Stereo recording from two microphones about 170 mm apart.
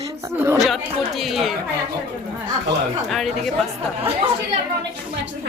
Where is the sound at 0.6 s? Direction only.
Centre (ahead or behind).